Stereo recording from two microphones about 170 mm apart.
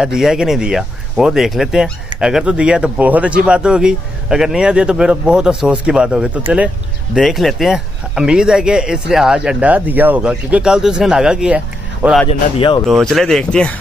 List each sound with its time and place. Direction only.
0.0 s speech: 5° right (ahead or behind)
12.3 s speech: 30° left (ahead or behind)
12.8 s speech: centre (ahead or behind)